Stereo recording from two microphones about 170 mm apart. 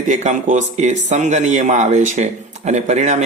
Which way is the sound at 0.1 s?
45° right (ahead or behind).